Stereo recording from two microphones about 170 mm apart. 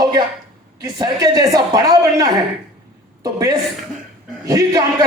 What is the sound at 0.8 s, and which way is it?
A woman's voice, 25° right (ahead or behind).